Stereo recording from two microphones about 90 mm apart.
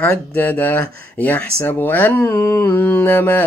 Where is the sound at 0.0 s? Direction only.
20° left (ahead or behind).